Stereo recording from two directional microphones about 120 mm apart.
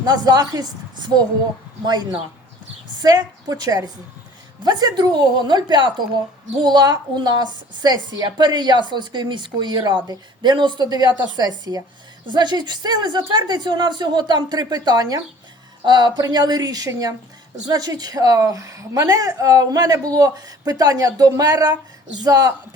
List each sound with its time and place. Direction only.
0.0 s a woman's voice: 35° right (ahead or behind)